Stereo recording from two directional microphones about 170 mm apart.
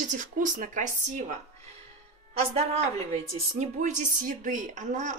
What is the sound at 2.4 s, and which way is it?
A woman's voice, 35° right (ahead or behind).